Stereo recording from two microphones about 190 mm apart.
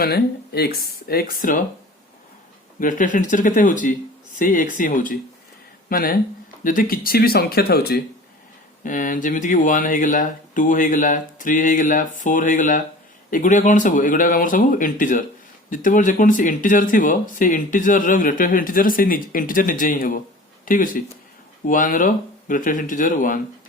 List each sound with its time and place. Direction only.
0.0 s speech: 55° left (ahead or behind)
2.8 s speech: 45° left (ahead or behind)
8.8 s speech: 45° left (ahead or behind)